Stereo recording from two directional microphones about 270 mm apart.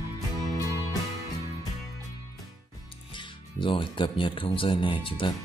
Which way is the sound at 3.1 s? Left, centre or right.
Centre.